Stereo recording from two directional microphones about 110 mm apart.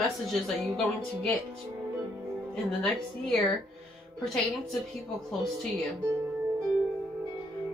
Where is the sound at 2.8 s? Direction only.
5° left (ahead or behind).